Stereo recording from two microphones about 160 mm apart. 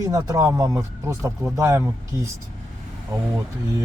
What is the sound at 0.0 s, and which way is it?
Speech, 20° right (ahead or behind).